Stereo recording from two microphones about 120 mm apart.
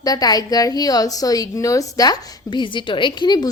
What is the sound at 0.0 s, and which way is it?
A woman's voice, 30° left (ahead or behind).